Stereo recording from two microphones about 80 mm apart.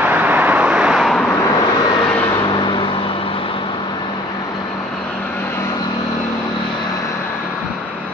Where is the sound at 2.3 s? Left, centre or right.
Left.